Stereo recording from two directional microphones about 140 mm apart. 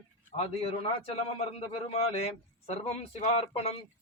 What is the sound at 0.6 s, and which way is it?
A man's voice, 45° left (ahead or behind).